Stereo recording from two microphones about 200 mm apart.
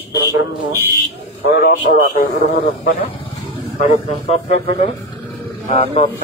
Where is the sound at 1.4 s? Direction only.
50° left (ahead or behind).